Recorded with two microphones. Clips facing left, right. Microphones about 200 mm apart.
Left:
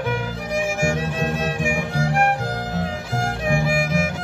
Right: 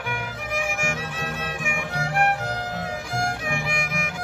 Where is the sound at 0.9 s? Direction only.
40° left (ahead or behind).